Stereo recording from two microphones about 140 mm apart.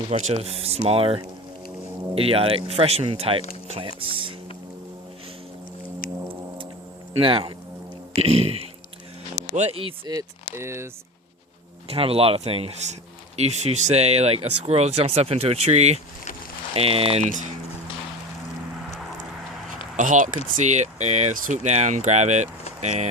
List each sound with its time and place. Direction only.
0.1 s speech: 50° right (ahead or behind)
6.0 s music: 90° left
7.2 s speech: 40° right (ahead or behind)
10.5 s speech: 20° right (ahead or behind)
11.9 s speech: 45° right (ahead or behind)
20.0 s speech: 65° right (ahead or behind)